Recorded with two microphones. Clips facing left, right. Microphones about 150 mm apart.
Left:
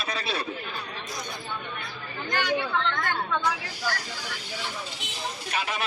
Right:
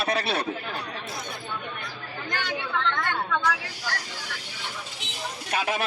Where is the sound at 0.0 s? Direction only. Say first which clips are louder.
Right 5 dB; 65° right (ahead or behind).